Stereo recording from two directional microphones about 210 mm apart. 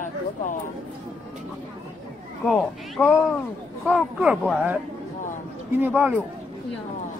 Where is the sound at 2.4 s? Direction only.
Centre (ahead or behind).